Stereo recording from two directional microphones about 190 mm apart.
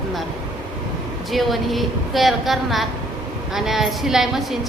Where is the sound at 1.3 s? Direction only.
Centre (ahead or behind).